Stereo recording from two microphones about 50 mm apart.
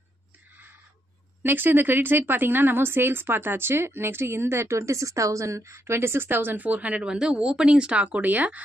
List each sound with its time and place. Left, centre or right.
1.4 s a woman's voice: right